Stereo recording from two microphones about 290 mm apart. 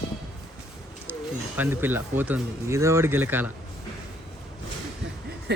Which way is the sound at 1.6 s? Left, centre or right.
Centre.